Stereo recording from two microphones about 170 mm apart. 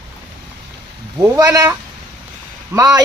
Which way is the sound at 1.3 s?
20° right (ahead or behind).